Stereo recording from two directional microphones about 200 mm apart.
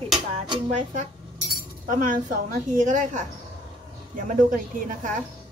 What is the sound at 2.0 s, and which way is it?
A woman's voice, 40° right (ahead or behind).